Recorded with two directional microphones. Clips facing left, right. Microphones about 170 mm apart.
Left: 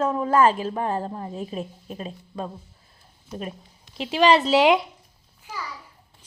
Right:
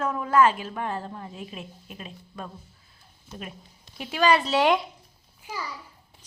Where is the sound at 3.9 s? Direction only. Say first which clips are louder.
Left 4 dB; 25° left (ahead or behind).